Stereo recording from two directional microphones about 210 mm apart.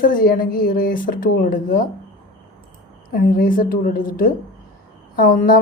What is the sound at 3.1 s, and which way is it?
A woman's voice, 45° left (ahead or behind).